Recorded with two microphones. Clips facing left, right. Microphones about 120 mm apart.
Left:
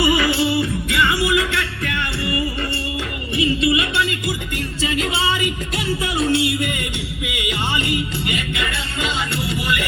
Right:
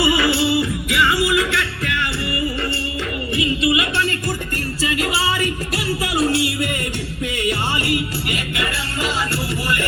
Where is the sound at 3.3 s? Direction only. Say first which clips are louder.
Left 2 dB; 30° left (ahead or behind).